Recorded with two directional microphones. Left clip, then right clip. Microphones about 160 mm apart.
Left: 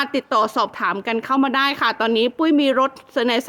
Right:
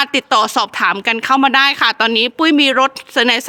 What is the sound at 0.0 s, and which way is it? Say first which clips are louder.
Speech: right 5 dB; 25° right (ahead or behind).